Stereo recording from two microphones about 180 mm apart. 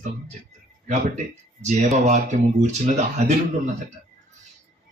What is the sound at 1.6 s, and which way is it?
Speech, 40° right (ahead or behind).